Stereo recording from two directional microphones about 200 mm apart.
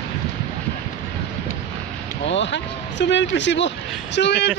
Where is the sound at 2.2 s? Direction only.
65° left (ahead or behind).